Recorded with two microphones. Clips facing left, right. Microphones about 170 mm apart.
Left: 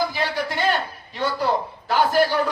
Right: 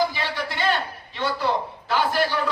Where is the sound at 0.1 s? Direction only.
45° left (ahead or behind).